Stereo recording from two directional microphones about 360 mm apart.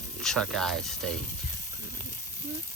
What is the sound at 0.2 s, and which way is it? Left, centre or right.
Speech, centre.